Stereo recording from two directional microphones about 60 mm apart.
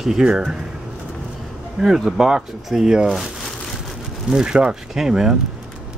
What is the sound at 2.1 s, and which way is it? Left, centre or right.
Speech, centre.